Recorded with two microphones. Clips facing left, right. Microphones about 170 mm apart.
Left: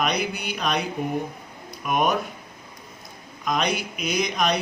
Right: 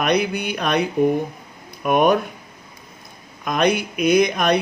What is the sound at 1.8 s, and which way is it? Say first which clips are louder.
Speech: right 7 dB; 55° right (ahead or behind).